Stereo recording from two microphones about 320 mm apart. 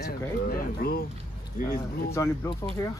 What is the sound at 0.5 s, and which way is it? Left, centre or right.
Speech, left.